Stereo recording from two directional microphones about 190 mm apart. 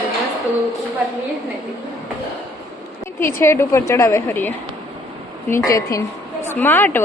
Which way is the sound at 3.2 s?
15° left (ahead or behind).